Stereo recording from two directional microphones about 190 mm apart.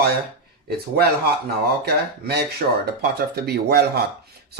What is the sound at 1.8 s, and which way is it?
Speech, 60° right (ahead or behind).